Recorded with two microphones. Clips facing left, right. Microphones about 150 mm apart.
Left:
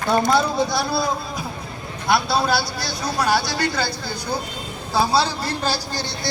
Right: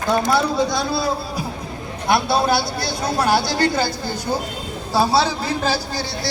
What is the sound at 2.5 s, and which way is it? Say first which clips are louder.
Speech: right 2 dB; 55° right (ahead or behind).